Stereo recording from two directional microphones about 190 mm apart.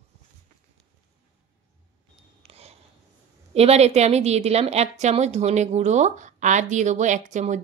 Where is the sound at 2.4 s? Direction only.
35° right (ahead or behind).